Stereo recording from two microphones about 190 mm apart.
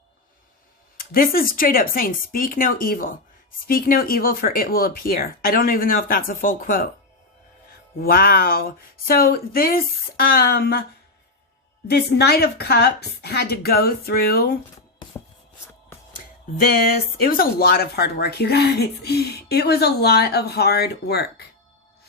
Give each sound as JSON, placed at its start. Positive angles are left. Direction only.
{"t": 0.9, "sound": "speech", "side_deg": 50}
{"t": 8.0, "sound": "speech", "side_deg": 50}
{"t": 11.9, "sound": "a woman's voice", "side_deg": 60}
{"t": 17.2, "sound": "a woman's voice", "side_deg": 50}